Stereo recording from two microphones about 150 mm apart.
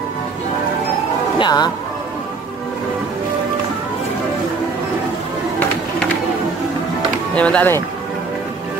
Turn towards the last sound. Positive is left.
turn(degrees=10)  # may be behind; listen again after turning